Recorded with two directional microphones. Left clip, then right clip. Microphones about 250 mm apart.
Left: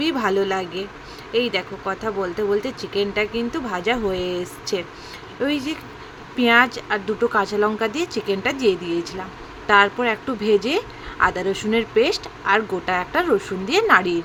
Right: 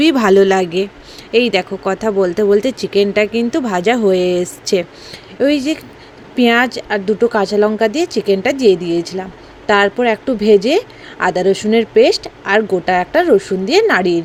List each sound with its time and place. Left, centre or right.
0.0 s speech: right